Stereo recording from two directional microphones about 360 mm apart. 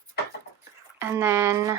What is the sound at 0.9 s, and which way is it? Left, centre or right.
Speech, centre.